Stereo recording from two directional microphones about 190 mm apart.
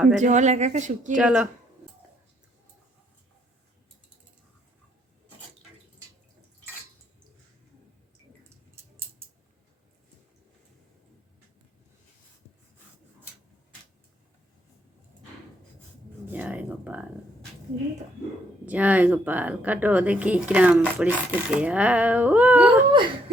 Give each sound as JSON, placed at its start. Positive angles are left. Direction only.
{"t": 0.2, "sound": "a woman's voice", "side_deg": -40}
{"t": 1.1, "sound": "speech", "side_deg": -5}
{"t": 16.3, "sound": "a sound", "side_deg": -10}
{"t": 18.6, "sound": "speech", "side_deg": -10}
{"t": 22.9, "sound": "whimper", "side_deg": -25}